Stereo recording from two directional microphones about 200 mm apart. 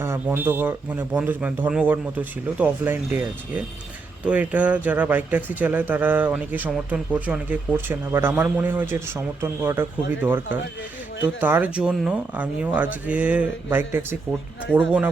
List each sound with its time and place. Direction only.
0.0 s a man's voice: 10° right (ahead or behind)